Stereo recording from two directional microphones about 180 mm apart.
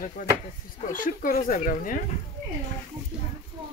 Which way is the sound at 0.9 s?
50° left (ahead or behind).